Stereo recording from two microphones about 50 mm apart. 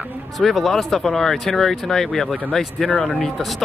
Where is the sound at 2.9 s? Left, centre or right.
Left.